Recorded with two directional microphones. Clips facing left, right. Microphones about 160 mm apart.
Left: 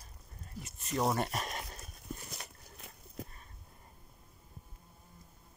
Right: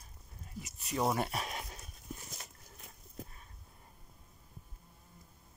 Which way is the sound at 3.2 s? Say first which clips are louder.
Left 3 dB; 75° left (ahead or behind).